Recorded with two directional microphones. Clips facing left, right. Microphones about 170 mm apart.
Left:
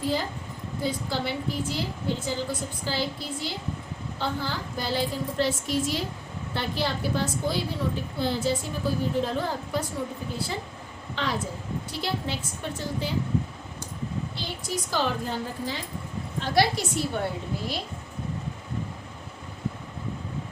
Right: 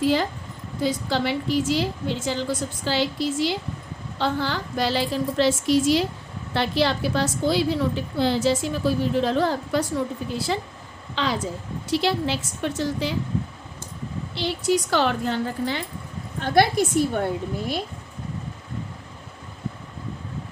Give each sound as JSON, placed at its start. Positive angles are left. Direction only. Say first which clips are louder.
{"t": 0.0, "sound": "a woman's voice", "louder": "right 6 dB", "side_deg": -85}
{"t": 14.3, "sound": "a woman's voice", "louder": "right 10 dB", "side_deg": -75}
{"t": 16.4, "sound": "a woman's voice", "louder": "right 5 dB", "side_deg": -55}